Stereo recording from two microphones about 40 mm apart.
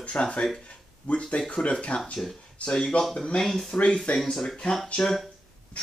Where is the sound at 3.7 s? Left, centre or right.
Left.